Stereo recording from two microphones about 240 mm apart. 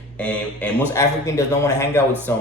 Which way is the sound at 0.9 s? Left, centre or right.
Centre.